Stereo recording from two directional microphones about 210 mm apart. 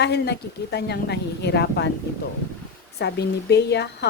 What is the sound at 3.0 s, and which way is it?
Speech, 50° left (ahead or behind).